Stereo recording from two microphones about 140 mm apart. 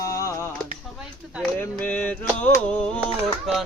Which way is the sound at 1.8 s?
10° left (ahead or behind).